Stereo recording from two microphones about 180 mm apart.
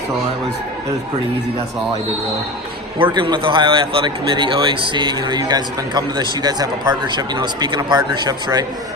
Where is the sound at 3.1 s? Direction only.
25° right (ahead or behind).